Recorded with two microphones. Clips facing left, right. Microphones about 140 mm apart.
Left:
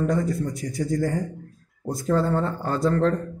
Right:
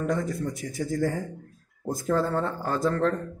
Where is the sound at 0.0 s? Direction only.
Centre (ahead or behind).